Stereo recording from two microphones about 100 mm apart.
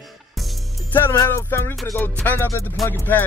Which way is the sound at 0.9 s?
25° left (ahead or behind).